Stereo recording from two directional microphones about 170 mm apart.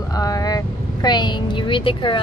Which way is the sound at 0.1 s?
20° left (ahead or behind).